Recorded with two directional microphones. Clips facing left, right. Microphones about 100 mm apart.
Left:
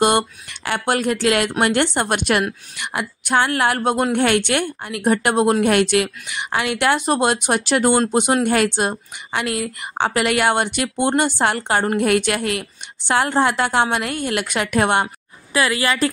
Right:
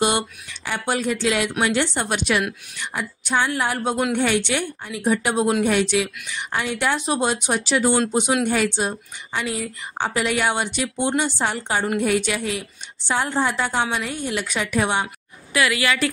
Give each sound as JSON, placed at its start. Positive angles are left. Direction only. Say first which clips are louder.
{"t": 0.0, "sound": "a woman's voice", "louder": "left 4 dB", "side_deg": 60}
{"t": 2.8, "sound": "a woman's voice", "louder": "left 3 dB", "side_deg": 65}
{"t": 15.5, "sound": "a woman's voice", "louder": "left 2 dB", "side_deg": 35}